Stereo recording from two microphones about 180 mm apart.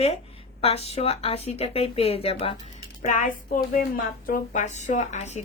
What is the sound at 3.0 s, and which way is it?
A woman's voice, 45° left (ahead or behind).